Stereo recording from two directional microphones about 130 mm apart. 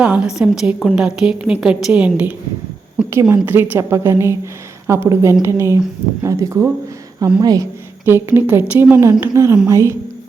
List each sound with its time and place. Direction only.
0.0 s a woman's voice: 10° right (ahead or behind)
3.1 s a woman's voice: 20° right (ahead or behind)